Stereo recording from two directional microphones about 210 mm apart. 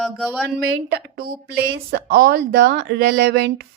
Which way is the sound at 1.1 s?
45° right (ahead or behind).